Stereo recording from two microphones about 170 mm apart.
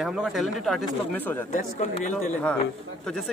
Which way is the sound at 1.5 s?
45° left (ahead or behind).